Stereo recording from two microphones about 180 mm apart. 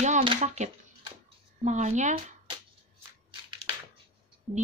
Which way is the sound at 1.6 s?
40° right (ahead or behind).